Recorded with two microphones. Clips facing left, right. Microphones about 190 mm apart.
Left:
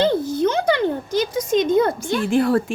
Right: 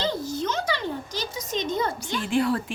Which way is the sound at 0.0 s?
55° left (ahead or behind).